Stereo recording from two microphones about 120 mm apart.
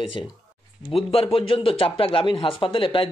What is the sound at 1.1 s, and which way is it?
Speech, 50° left (ahead or behind).